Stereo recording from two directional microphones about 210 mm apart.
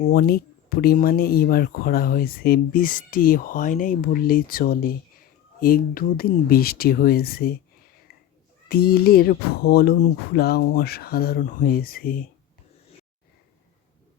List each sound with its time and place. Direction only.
0.0 s speech: 45° left (ahead or behind)
8.7 s speech: 45° left (ahead or behind)